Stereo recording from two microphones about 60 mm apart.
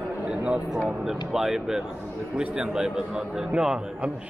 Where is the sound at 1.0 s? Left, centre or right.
Centre.